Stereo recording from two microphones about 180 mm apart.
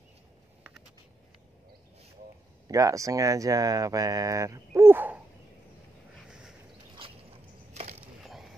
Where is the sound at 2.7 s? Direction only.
20° right (ahead or behind).